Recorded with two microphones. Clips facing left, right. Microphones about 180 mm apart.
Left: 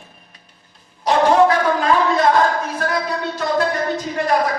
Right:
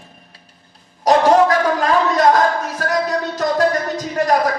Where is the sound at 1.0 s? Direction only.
40° right (ahead or behind).